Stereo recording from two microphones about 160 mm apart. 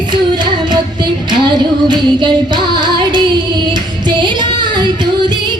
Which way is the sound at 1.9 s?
30° right (ahead or behind).